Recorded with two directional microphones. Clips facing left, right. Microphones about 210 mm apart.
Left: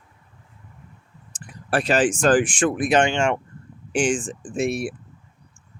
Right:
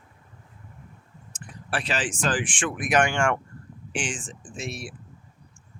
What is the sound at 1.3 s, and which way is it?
Speech, 45° left (ahead or behind).